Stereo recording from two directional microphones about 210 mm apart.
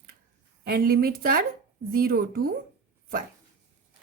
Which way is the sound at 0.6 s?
45° right (ahead or behind).